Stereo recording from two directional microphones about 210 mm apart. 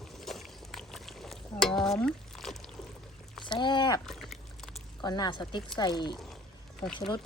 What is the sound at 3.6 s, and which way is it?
Speech, 20° left (ahead or behind).